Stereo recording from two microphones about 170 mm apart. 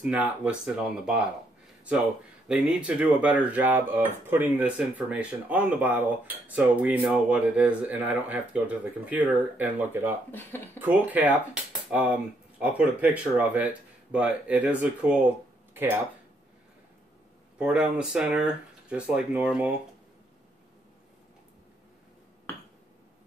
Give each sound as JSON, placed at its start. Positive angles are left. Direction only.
{"t": 0.0, "sound": "speech", "side_deg": -5}
{"t": 2.4, "sound": "speech", "side_deg": -5}
{"t": 10.3, "sound": "speech", "side_deg": 10}
{"t": 10.8, "sound": "speech", "side_deg": -10}
{"t": 17.6, "sound": "speech", "side_deg": -5}